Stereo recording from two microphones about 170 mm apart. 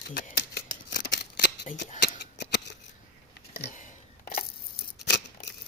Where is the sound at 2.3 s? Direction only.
80° left.